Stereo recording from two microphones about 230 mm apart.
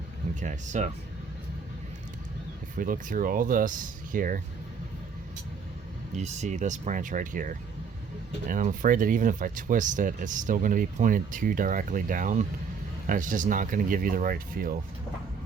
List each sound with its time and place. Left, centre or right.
0.3 s speech: right
2.7 s speech: right
6.1 s speech: right